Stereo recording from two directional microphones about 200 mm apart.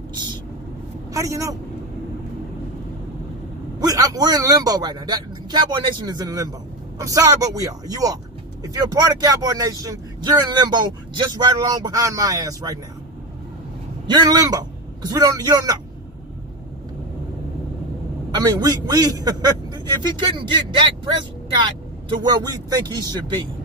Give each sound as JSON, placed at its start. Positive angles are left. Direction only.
{"t": 0.1, "sound": "speech", "side_deg": -20}
{"t": 3.8, "sound": "a man's voice", "side_deg": -15}
{"t": 14.0, "sound": "speech", "side_deg": -20}
{"t": 18.3, "sound": "a man's voice", "side_deg": -20}